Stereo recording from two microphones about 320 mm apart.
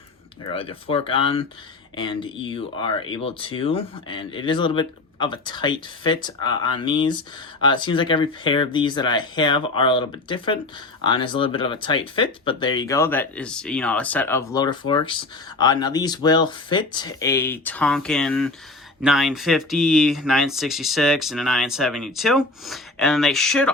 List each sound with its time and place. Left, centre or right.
0.5 s speech: centre